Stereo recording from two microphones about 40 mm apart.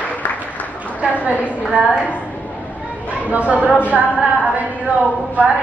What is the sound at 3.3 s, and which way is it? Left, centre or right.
Speech, right.